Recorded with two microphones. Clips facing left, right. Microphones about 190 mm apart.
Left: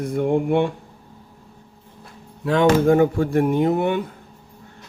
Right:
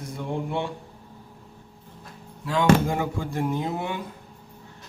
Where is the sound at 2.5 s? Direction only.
65° left (ahead or behind).